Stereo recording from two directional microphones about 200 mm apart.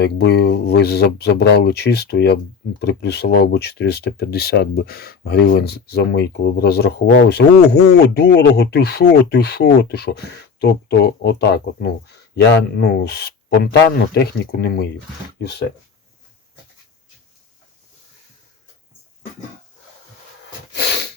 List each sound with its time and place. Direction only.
0.0 s speech: 55° left (ahead or behind)